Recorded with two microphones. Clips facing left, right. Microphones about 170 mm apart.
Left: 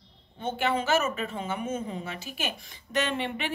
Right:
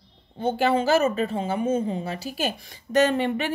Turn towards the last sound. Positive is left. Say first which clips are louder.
# right 8 dB
turn(degrees=-40)  # may be behind; listen again after turning